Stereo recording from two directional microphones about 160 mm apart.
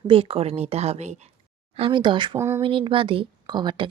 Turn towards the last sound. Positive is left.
turn(degrees=-30)  # may be behind; listen again after turning